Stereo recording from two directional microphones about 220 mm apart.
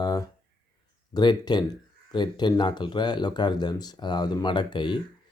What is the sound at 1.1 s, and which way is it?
Speech, 20° left (ahead or behind).